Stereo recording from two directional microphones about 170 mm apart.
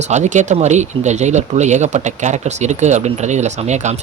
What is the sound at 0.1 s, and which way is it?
Speech, 45° right (ahead or behind).